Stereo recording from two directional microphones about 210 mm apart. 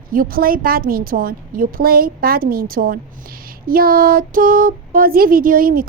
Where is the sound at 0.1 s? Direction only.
40° right (ahead or behind).